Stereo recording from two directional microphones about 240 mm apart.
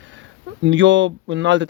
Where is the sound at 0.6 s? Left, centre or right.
Right.